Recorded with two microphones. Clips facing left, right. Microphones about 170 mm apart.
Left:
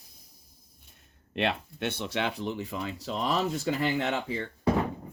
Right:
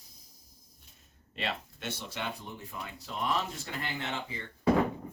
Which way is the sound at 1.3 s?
60° left (ahead or behind).